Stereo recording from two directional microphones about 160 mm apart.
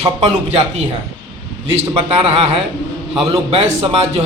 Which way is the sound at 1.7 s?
35° right (ahead or behind).